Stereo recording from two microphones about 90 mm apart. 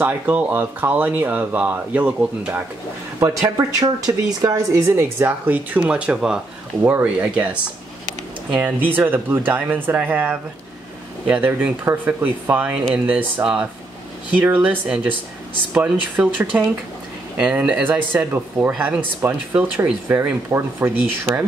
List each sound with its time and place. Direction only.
0.0 s speech: 15° right (ahead or behind)
3.2 s speech: 40° right (ahead or behind); by 7.4 s 15° right (ahead or behind)
8.5 s speech: 20° right (ahead or behind)